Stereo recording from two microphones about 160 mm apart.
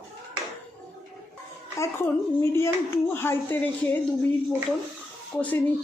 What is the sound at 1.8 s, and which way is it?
Speech, 15° left (ahead or behind).